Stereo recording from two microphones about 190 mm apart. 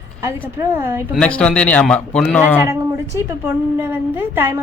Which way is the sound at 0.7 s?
15° right (ahead or behind).